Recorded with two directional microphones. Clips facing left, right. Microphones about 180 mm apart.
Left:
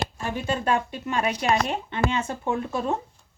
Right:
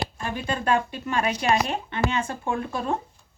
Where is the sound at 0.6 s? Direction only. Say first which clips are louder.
Right 1 dB; 20° left (ahead or behind).